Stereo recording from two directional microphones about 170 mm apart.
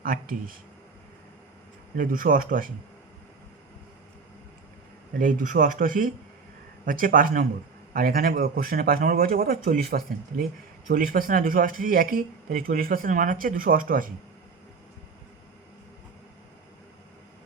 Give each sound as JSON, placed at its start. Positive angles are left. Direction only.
{"t": 0.0, "sound": "speech", "side_deg": -55}
{"t": 2.0, "sound": "speech", "side_deg": -55}
{"t": 5.1, "sound": "speech", "side_deg": -55}